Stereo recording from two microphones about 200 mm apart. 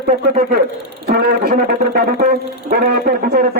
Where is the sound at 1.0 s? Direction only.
50° right (ahead or behind).